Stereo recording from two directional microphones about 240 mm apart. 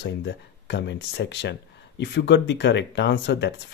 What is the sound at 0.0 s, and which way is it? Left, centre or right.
Speech, left.